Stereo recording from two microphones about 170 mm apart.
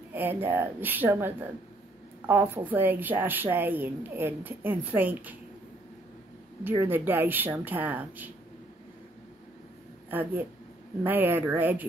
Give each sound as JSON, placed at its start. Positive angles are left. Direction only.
{"t": 0.1, "sound": "a woman's voice", "side_deg": -10}
{"t": 6.6, "sound": "a woman's voice", "side_deg": -15}
{"t": 10.0, "sound": "a woman's voice", "side_deg": -10}